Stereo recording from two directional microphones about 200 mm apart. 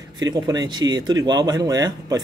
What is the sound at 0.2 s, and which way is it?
Speech, 20° right (ahead or behind).